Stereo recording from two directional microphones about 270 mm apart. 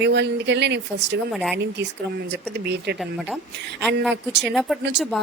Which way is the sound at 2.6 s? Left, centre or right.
Right.